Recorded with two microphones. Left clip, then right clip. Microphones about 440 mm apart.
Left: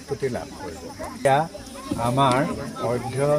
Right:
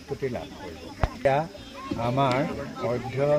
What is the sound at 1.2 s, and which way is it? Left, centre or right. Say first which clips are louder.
Speech: left 5 dB; right.